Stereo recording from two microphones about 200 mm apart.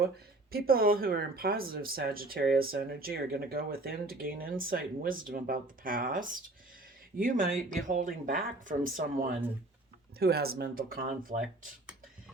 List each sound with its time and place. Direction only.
0.5 s speech: 50° right (ahead or behind)
10.2 s speech: 50° right (ahead or behind)